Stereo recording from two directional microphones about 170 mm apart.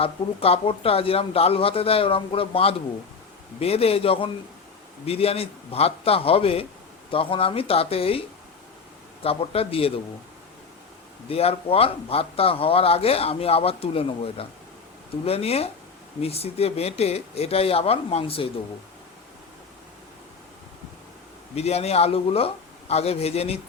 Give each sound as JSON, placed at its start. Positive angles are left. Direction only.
{"t": 0.0, "sound": "a man's voice", "side_deg": 35}
{"t": 9.2, "sound": "a man's voice", "side_deg": 35}
{"t": 11.3, "sound": "a man's voice", "side_deg": 35}
{"t": 21.5, "sound": "a man's voice", "side_deg": 40}